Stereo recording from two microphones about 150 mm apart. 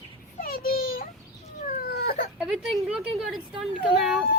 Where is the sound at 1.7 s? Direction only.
85° left.